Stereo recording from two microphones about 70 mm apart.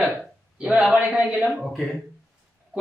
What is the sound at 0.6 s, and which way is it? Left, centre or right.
Speech, centre.